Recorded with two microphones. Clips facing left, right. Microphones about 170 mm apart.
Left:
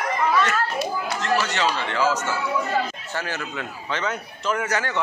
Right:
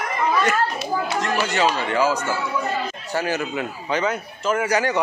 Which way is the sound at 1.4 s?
10° right (ahead or behind).